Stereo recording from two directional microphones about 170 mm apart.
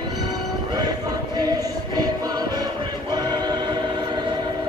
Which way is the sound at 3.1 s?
25° right (ahead or behind).